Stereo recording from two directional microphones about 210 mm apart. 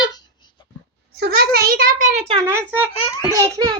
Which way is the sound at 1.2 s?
45° right (ahead or behind).